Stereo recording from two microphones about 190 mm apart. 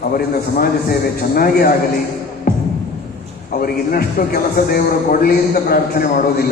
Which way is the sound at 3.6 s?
50° left (ahead or behind).